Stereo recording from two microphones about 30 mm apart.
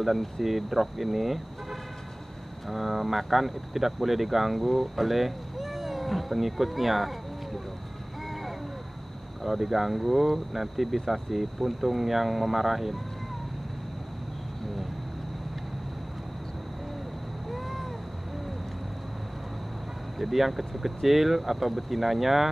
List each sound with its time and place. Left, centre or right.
0.0 s speech: centre
9.4 s speech: centre
17.5 s a sound: centre
20.2 s speech: centre